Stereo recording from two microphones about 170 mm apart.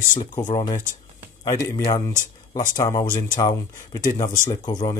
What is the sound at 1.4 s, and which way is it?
Speech, 20° left (ahead or behind).